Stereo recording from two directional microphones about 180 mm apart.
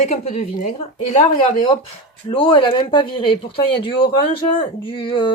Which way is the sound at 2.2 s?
30° left (ahead or behind).